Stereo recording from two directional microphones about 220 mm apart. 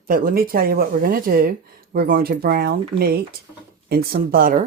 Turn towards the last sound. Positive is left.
turn(degrees=-40)  # may be behind; listen again after turning